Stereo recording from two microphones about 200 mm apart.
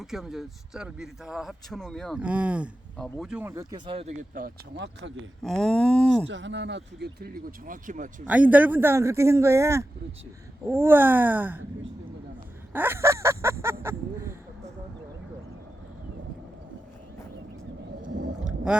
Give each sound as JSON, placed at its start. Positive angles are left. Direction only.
{"t": 0.0, "sound": "speech", "side_deg": 0}
{"t": 4.4, "sound": "speech", "side_deg": -50}
{"t": 5.4, "sound": "speech", "side_deg": 0}
{"t": 6.2, "sound": "speech", "side_deg": -65}
{"t": 8.3, "sound": "speech", "side_deg": -10}
{"t": 12.7, "sound": "speech", "side_deg": -10}
{"t": 18.4, "sound": "whale vocalization", "side_deg": -5}